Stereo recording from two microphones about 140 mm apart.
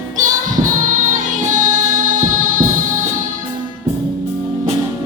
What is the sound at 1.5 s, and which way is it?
Music, 70° right (ahead or behind).